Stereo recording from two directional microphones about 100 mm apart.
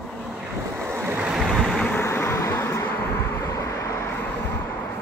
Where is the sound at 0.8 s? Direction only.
20° right (ahead or behind).